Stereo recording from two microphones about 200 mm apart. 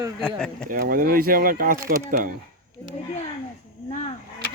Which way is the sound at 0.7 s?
45° right (ahead or behind).